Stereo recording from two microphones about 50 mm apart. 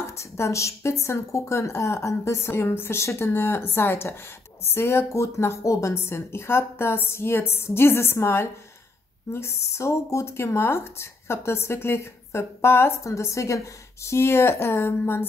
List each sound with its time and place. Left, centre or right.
0.2 s a woman's voice: left
14.0 s speech: left